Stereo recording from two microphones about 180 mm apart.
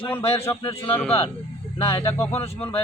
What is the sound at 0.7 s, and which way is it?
Speech, 15° left (ahead or behind).